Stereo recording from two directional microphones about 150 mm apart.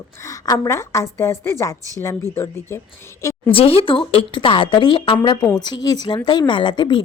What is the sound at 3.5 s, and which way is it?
A woman's voice, 40° left (ahead or behind).